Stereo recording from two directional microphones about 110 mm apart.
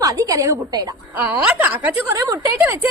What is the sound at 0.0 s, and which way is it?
Speech, 30° right (ahead or behind).